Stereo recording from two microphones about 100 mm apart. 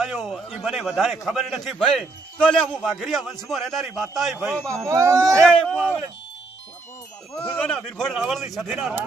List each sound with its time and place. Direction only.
0.0 s a man's voice: 5° right (ahead or behind)
1.8 s a man's voice: 10° left (ahead or behind)
4.7 s speech: 30° right (ahead or behind)
5.4 s speech: 10° left (ahead or behind)
7.4 s speech: 10° left (ahead or behind)
8.1 s a man's voice: 5° right (ahead or behind)